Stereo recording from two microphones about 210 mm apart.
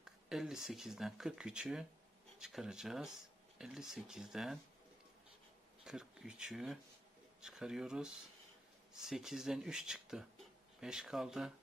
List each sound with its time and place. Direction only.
0.0 s speech: centre (ahead or behind)
5.9 s speech: 5° right (ahead or behind)